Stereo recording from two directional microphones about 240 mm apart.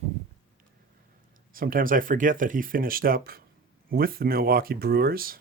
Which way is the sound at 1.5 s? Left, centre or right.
Right.